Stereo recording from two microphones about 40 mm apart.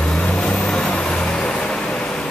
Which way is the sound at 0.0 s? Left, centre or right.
Left.